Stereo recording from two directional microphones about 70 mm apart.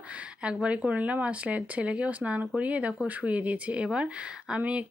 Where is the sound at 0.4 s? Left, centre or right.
Centre.